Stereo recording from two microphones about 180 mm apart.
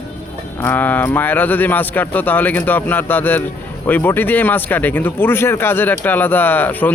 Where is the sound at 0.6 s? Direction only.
10° left (ahead or behind).